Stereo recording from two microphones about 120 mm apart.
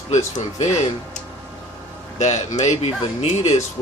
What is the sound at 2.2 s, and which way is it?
Speech, 70° left (ahead or behind).